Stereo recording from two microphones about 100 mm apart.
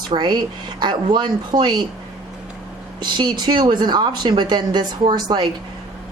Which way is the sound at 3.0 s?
50° right (ahead or behind).